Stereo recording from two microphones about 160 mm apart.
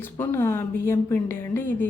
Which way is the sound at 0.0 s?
15° left (ahead or behind).